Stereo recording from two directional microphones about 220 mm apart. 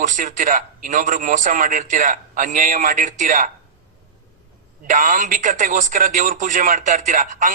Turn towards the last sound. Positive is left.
turn(degrees=-35)  # may be behind; listen again after turning